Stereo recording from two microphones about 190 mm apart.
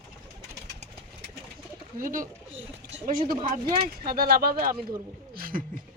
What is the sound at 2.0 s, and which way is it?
Speech, 45° right (ahead or behind).